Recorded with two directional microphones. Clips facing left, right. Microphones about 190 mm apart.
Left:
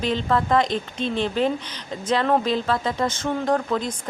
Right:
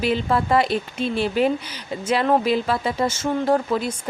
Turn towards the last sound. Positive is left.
turn(degrees=-10)  # may be behind; listen again after turning